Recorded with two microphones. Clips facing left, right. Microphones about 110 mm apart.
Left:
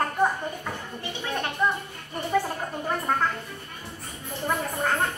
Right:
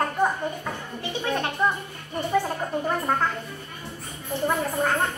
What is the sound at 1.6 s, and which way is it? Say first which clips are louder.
Speech: right 1 dB; 15° right (ahead or behind).